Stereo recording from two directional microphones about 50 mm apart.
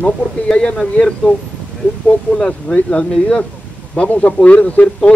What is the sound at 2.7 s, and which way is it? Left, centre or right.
A man's voice, left.